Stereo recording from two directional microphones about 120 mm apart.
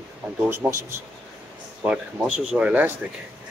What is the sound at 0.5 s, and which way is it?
Speech, 20° right (ahead or behind).